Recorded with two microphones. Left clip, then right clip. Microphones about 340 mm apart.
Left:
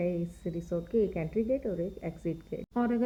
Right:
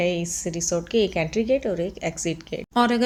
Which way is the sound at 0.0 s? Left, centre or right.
Left.